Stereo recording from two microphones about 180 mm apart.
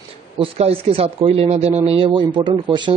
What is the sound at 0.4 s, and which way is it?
Speech, 35° right (ahead or behind).